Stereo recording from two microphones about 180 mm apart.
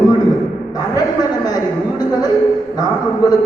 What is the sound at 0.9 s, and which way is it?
Speech, 20° left (ahead or behind).